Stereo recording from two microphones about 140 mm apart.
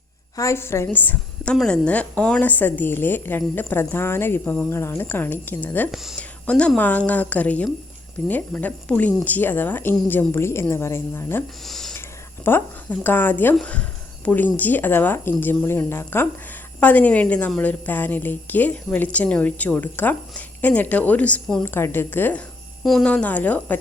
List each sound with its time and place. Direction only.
0.3 s a woman's voice: 20° left (ahead or behind)
5.9 s speech: centre (ahead or behind)
6.1 s a woman's voice: 10° left (ahead or behind)
11.6 s speech: centre (ahead or behind)
12.5 s a woman's voice: 15° left (ahead or behind)